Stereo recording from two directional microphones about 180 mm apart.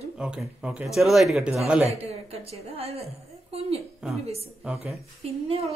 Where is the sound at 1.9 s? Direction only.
35° right (ahead or behind).